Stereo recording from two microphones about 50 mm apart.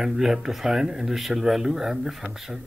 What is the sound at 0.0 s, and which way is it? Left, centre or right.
Speech, centre.